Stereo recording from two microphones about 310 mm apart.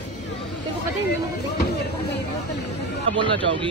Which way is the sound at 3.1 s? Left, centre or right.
Centre.